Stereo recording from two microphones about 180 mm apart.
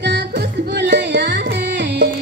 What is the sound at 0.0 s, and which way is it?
Music, 75° right (ahead or behind).